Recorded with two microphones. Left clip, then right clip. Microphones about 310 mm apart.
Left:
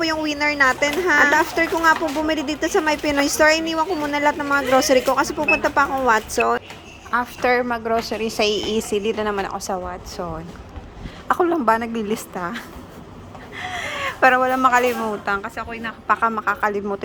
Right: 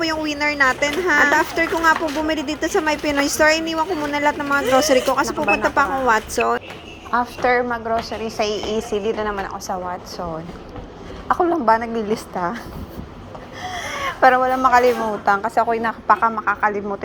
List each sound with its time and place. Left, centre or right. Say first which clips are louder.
0.0 s a woman's voice: even; centre
7.1 s a woman's voice: right 1 dB; centre
13.7 s a sound: right 1 dB; centre
15.2 s a woman's voice: right 7 dB; centre